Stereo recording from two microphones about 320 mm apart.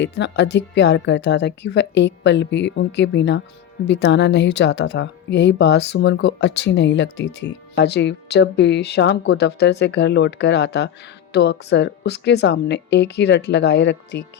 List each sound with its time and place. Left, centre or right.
0.0 s speech: left